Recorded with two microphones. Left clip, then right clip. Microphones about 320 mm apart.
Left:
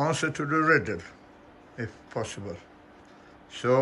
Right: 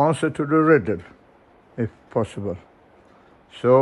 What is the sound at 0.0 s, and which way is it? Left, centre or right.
Speech, centre.